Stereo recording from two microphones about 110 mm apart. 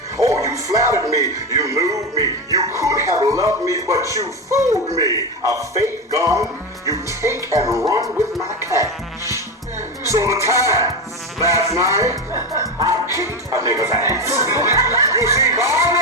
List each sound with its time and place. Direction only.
0.2 s speech: 30° right (ahead or behind)
8.4 s music: 30° right (ahead or behind)
10.0 s speech: 25° right (ahead or behind)